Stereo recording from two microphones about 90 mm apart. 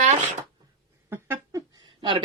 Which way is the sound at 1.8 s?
70° right (ahead or behind).